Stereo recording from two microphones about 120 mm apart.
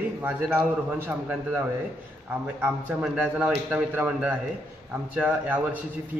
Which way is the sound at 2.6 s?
10° right (ahead or behind).